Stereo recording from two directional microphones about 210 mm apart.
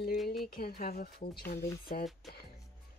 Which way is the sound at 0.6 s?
45° left (ahead or behind).